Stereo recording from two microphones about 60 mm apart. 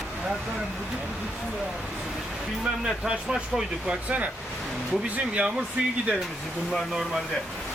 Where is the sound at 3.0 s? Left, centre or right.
Centre.